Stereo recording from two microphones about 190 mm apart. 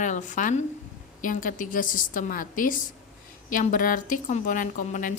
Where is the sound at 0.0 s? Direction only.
40° left (ahead or behind).